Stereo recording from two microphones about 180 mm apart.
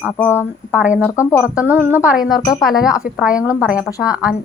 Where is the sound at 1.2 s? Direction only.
15° left (ahead or behind).